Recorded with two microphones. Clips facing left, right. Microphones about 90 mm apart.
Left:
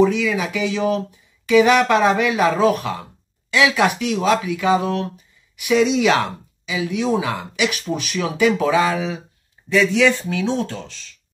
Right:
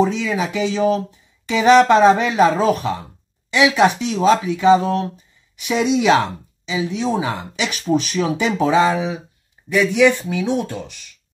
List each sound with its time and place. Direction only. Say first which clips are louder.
0.0 s speech: left 1 dB; 30° right (ahead or behind); by 11.1 s 15° right (ahead or behind)